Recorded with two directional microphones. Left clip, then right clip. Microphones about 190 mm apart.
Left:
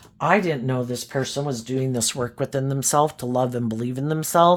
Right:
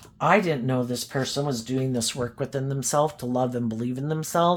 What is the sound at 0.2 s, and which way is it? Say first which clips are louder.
Speech: left 1 dB; 30° left (ahead or behind).